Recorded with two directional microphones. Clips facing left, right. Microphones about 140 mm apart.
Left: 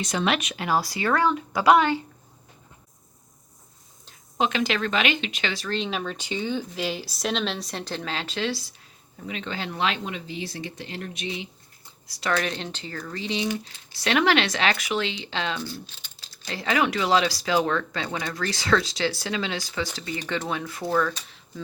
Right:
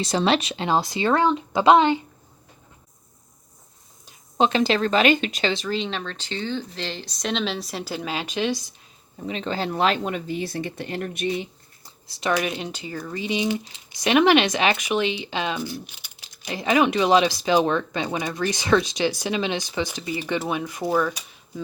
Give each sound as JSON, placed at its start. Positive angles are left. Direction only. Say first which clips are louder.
{"t": 0.0, "sound": "speech", "louder": "right 4 dB", "side_deg": -30}
{"t": 4.4, "sound": "a woman's voice", "louder": "right 5 dB", "side_deg": -30}
{"t": 5.6, "sound": "speech", "louder": "right 1 dB", "side_deg": 0}
{"t": 9.2, "sound": "speech", "louder": "right 5 dB", "side_deg": -35}
{"t": 12.0, "sound": "speech", "louder": "right 2 dB", "side_deg": -20}